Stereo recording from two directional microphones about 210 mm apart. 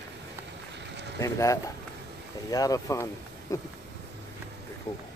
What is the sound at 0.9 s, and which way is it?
Vehicle, 55° right (ahead or behind).